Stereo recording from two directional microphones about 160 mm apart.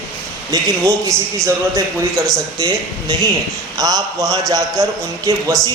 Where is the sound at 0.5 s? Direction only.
20° right (ahead or behind).